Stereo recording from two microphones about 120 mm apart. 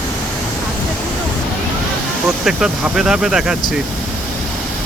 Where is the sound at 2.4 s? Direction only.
5° right (ahead or behind).